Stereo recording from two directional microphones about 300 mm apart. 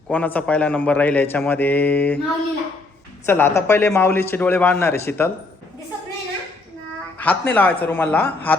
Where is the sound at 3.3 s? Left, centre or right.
Centre.